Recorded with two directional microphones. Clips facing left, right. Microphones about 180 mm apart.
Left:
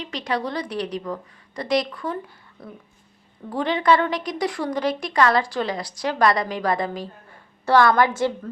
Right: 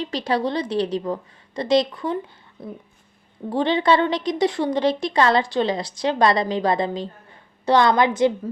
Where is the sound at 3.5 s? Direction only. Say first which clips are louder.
Right 1 dB; 25° right (ahead or behind).